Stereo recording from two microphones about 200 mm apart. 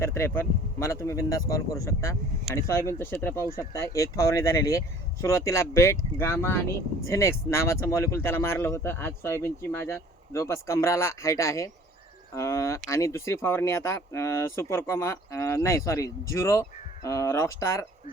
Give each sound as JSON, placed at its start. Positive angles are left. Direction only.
{"t": 0.0, "sound": "speech", "side_deg": 15}